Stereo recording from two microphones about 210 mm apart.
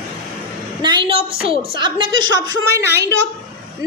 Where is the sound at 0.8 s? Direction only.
20° right (ahead or behind).